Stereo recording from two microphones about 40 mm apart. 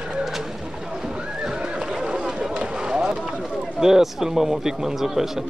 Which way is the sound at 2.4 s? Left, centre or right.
Right.